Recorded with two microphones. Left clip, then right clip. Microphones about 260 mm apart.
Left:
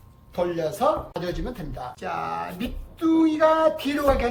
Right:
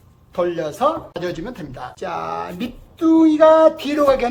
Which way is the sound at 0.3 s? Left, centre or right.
Centre.